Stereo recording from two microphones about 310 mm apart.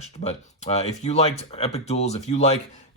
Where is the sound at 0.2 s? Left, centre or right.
Left.